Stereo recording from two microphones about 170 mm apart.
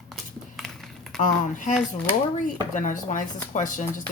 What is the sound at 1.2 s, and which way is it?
Speech, 50° left (ahead or behind).